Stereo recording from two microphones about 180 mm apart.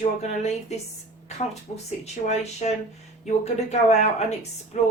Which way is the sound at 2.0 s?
35° left (ahead or behind).